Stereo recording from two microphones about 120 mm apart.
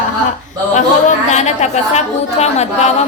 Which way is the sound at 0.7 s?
80° left.